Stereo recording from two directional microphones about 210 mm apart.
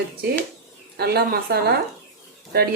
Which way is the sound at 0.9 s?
50° right (ahead or behind).